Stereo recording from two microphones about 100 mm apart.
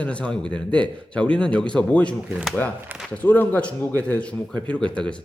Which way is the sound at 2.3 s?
10° right (ahead or behind).